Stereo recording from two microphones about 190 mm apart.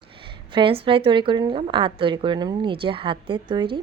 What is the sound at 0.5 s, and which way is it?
A woman's voice, 25° right (ahead or behind).